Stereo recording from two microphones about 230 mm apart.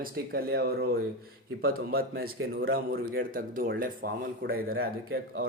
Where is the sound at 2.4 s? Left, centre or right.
Right.